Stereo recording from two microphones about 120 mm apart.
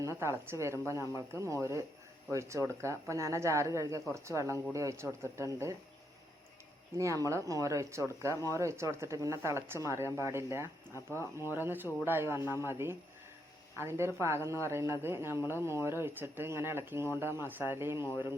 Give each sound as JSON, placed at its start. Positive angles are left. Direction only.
{"t": 0.2, "sound": "speech", "side_deg": -25}
{"t": 6.9, "sound": "speech", "side_deg": -25}
{"t": 10.9, "sound": "speech", "side_deg": 25}
{"t": 11.5, "sound": "speech", "side_deg": -15}